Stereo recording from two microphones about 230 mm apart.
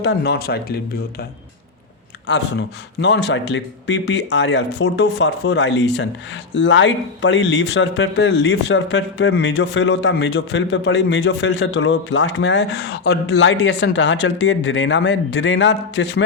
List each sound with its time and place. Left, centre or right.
0.0 s speech: left
2.2 s speech: left